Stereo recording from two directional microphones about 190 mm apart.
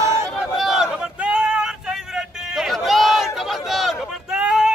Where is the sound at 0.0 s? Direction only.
15° right (ahead or behind).